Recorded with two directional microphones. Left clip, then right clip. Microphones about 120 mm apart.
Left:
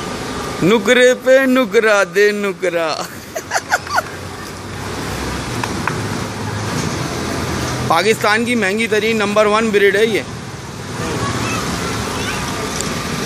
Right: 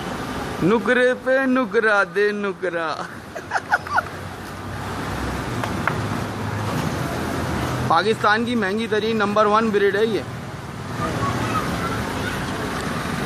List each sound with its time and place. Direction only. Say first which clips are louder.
0.7 s a man's voice: left 7 dB; 15° left (ahead or behind)
3.5 s a sound: left 3 dB; 20° left (ahead or behind)
7.9 s speech: left 4 dB; 10° left (ahead or behind)